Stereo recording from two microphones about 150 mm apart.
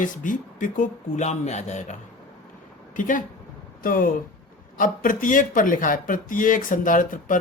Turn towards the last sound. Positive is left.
turn(degrees=65)  # may be behind; listen again after turning